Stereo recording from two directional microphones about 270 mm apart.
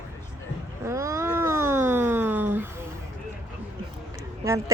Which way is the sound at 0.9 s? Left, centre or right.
Centre.